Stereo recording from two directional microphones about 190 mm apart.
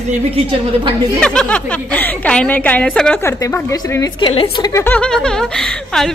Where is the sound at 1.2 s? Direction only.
5° left (ahead or behind); by 4.7 s 25° left (ahead or behind).